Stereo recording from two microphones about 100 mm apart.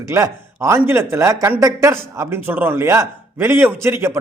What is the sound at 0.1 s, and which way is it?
A man's voice, 30° right (ahead or behind).